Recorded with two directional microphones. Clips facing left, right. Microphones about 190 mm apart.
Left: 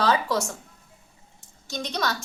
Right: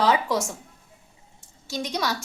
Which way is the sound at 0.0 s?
15° right (ahead or behind).